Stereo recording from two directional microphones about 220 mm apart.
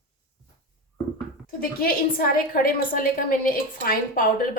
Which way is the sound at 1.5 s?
40° left (ahead or behind).